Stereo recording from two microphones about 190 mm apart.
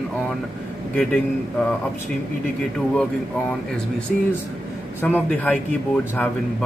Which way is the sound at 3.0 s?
5° left (ahead or behind).